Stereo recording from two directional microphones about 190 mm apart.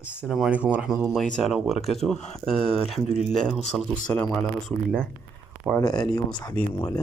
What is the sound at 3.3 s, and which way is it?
Speech, centre (ahead or behind).